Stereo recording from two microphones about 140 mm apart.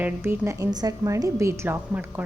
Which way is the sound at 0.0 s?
15° right (ahead or behind).